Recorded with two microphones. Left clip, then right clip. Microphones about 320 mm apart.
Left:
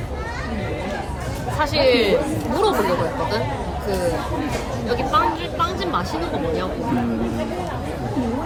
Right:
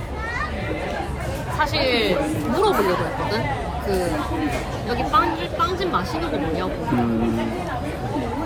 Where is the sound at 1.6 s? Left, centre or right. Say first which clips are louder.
Left 3 dB; centre.